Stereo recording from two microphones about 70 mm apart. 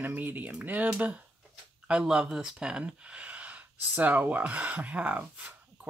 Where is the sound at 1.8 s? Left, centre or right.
Centre.